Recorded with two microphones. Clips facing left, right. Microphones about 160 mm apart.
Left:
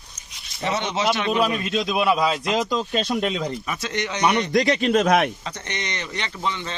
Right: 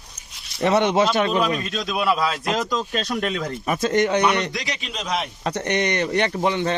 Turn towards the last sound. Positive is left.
turn(degrees=-55)  # may be behind; listen again after turning